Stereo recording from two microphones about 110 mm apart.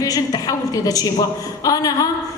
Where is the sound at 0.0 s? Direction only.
35° left (ahead or behind).